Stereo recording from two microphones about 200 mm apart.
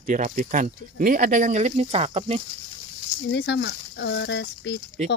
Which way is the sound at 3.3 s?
60° left (ahead or behind).